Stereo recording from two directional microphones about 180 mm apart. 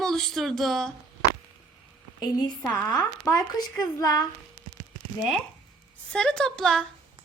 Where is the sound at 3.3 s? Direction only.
20° left (ahead or behind).